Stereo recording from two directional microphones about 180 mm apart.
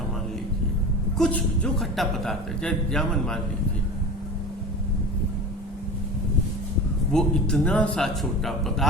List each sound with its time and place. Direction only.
1.2 s speech: 5° left (ahead or behind)
7.1 s speech: 5° left (ahead or behind)